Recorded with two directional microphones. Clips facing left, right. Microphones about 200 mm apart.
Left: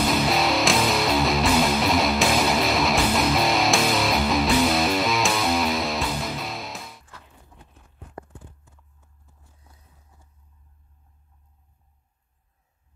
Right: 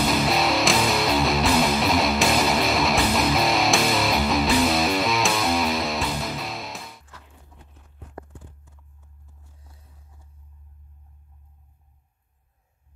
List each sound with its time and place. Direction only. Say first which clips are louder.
0.0 s music: even; centre (ahead or behind)